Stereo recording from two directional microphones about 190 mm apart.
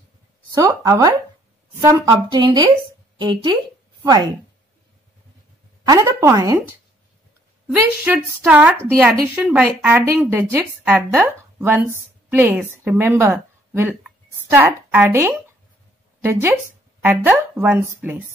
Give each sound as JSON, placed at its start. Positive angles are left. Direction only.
{"t": 0.5, "sound": "speech", "side_deg": -20}
{"t": 5.9, "sound": "speech", "side_deg": -15}
{"t": 7.6, "sound": "speech", "side_deg": -10}